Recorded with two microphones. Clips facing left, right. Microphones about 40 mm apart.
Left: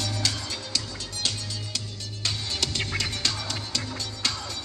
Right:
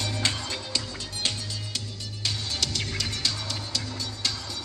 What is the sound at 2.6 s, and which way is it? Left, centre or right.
Music, left.